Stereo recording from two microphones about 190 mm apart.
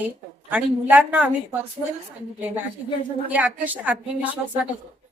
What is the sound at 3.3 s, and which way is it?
Speech, 10° right (ahead or behind).